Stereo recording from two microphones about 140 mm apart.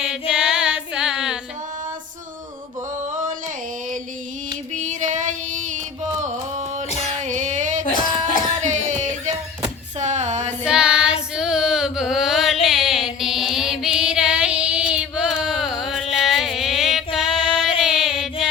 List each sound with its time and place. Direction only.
0.0 s music: 5° right (ahead or behind)
4.7 s female singing: 60° right (ahead or behind)
6.1 s music: 60° right (ahead or behind)
10.0 s a sound: 60° right (ahead or behind)
10.6 s female singing: 5° right (ahead or behind)
17.2 s music: 5° right (ahead or behind)